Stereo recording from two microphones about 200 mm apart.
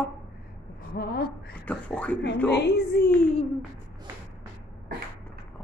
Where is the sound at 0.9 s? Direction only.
50° left (ahead or behind).